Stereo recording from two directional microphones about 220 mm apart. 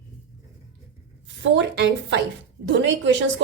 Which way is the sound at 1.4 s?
55° right (ahead or behind).